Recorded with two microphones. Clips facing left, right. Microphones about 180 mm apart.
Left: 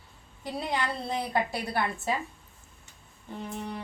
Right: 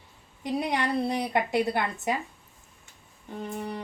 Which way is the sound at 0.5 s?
20° right (ahead or behind).